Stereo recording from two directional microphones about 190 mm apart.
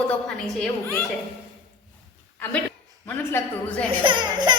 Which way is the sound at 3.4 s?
15° left (ahead or behind).